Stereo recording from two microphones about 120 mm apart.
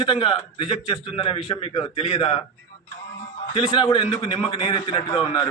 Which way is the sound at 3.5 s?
45° left (ahead or behind).